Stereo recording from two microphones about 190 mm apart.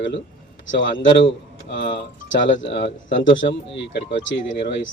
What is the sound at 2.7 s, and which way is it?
Speech, 75° left (ahead or behind).